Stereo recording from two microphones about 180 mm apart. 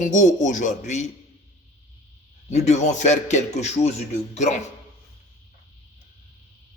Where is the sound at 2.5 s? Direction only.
40° left (ahead or behind).